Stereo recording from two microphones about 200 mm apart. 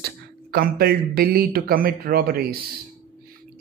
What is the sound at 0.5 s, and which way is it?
Speech, 50° right (ahead or behind).